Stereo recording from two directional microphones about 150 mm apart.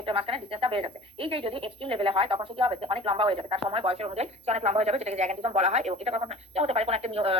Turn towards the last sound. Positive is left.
turn(degrees=-40)  # may be behind; listen again after turning